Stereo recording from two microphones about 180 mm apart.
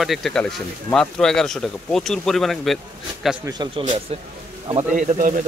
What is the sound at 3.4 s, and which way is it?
Speech, 25° right (ahead or behind).